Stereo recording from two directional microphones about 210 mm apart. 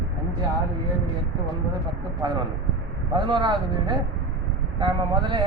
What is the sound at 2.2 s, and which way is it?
A man's voice, 20° right (ahead or behind).